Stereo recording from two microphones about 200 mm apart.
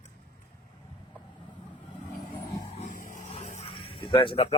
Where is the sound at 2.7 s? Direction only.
40° left (ahead or behind).